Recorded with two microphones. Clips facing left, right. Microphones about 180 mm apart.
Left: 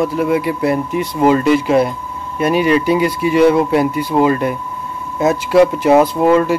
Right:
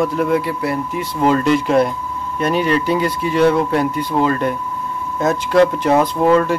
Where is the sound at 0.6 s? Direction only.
20° left (ahead or behind).